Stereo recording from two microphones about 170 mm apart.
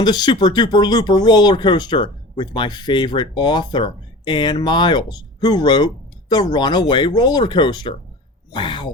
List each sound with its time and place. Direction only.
0.0 s speech: 25° left (ahead or behind)